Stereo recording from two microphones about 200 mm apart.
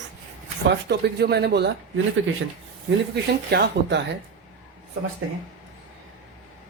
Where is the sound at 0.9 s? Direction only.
55° right (ahead or behind).